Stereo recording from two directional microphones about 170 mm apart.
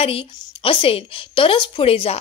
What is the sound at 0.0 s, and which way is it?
A woman's voice, 35° left (ahead or behind).